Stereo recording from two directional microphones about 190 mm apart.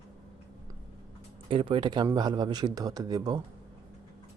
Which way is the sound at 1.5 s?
25° right (ahead or behind).